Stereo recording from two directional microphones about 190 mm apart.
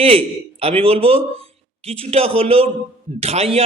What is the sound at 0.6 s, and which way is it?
Speech, 30° right (ahead or behind).